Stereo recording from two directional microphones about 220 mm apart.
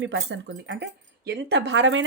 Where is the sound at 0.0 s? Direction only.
55° right (ahead or behind).